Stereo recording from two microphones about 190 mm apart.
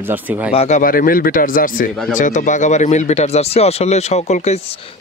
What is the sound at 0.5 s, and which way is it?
Speech, 40° left (ahead or behind).